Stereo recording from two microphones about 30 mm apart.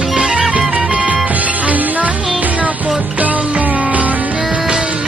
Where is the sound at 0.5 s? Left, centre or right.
Right.